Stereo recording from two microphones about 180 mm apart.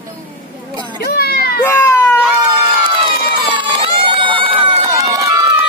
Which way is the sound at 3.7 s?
30° right (ahead or behind).